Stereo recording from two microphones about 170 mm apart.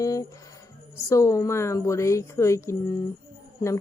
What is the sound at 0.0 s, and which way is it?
A woman's voice, 20° left (ahead or behind).